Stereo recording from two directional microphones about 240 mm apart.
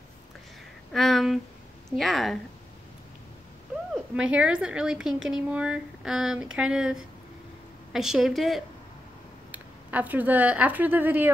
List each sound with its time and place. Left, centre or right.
0.9 s a woman's voice: centre
3.9 s a woman's voice: centre